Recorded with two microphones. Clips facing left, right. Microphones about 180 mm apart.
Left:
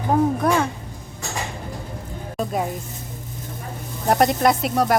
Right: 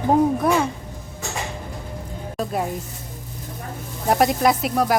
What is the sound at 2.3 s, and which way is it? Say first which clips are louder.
Music: left 1 dB; centre (ahead or behind).